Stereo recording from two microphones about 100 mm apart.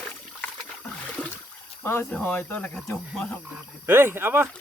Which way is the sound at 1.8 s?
20° left (ahead or behind).